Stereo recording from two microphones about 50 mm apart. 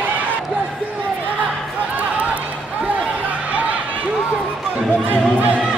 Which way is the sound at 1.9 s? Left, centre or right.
Right.